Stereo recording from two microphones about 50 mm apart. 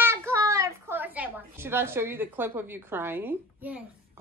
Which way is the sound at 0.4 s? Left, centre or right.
Right.